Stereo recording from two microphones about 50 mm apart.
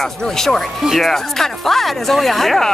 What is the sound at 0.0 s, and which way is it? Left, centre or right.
Speech, centre.